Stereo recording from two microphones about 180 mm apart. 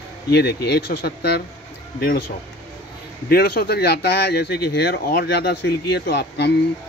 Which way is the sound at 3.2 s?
60° left (ahead or behind).